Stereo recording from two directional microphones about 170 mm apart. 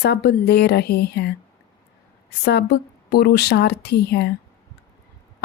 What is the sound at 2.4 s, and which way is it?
A woman's voice, 75° left (ahead or behind).